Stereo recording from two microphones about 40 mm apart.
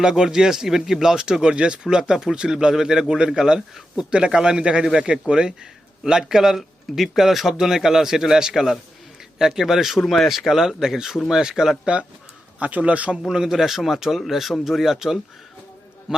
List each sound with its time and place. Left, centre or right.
0.0 s a man's voice: centre
12.5 s a man's voice: right
13.2 s a man's voice: centre